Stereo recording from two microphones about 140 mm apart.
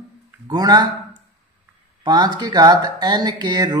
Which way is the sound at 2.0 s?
30° right (ahead or behind).